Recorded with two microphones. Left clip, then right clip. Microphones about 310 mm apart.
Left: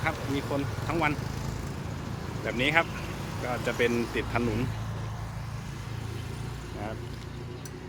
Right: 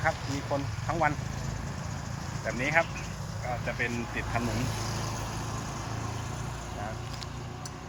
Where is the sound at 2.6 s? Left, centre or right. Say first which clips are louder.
Left 2 dB; centre.